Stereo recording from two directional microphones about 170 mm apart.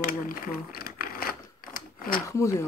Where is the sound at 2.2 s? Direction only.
20° left (ahead or behind).